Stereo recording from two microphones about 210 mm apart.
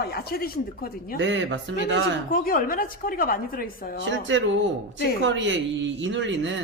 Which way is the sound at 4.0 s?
60° right (ahead or behind).